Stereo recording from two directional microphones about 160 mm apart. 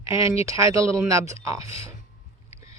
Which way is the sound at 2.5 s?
20° right (ahead or behind).